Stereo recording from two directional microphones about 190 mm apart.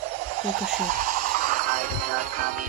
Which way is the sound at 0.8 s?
50° right (ahead or behind).